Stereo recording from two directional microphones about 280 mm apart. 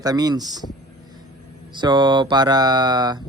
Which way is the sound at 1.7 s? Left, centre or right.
Centre.